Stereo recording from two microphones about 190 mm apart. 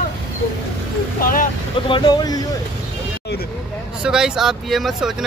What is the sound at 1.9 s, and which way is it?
Speech, 20° left (ahead or behind).